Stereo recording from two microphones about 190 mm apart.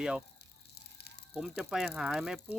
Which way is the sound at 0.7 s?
60° left (ahead or behind).